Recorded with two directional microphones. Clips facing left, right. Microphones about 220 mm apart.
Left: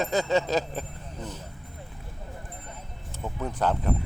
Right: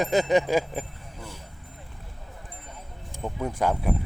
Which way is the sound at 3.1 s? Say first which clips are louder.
Right 2 dB; 10° right (ahead or behind).